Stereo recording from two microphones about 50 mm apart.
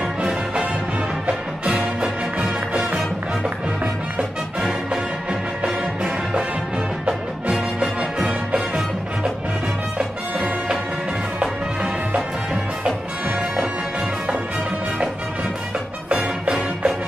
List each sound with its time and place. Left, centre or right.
0.0 s music: centre
3.8 s music: centre
9.9 s music: right
16.4 s music: centre